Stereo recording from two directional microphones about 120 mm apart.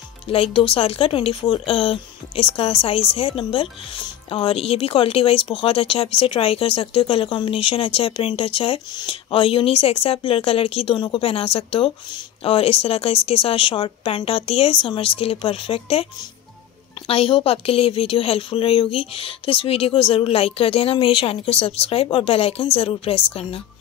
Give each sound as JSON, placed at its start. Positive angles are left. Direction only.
{"t": 0.3, "sound": "speech", "side_deg": 50}
{"t": 17.1, "sound": "speech", "side_deg": 50}